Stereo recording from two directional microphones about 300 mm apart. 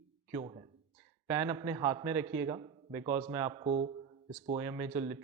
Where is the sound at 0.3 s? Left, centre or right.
Centre.